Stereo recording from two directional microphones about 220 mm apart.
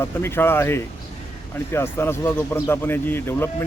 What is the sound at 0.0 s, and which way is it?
A man's voice, 10° left (ahead or behind).